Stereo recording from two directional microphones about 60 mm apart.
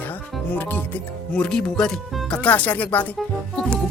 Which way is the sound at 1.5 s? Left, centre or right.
Centre.